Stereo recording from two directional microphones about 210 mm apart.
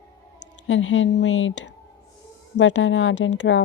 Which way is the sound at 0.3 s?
65° left (ahead or behind).